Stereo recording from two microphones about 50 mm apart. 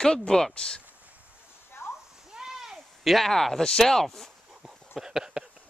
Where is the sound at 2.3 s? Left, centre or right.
Centre.